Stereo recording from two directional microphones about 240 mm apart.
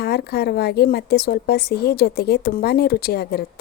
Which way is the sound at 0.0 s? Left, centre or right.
Left.